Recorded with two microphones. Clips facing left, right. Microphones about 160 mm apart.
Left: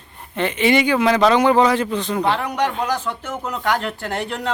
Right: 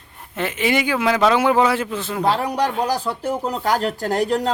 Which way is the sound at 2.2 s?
35° right (ahead or behind).